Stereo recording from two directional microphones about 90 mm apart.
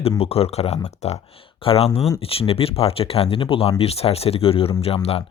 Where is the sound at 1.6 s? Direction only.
80° left.